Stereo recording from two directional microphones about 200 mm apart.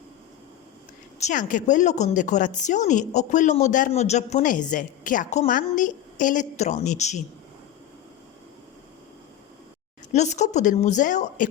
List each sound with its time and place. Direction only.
1.2 s a woman's voice: 40° left (ahead or behind)
10.1 s a woman's voice: 35° left (ahead or behind)